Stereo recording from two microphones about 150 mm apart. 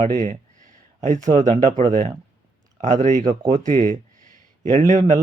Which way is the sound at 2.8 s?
55° right (ahead or behind).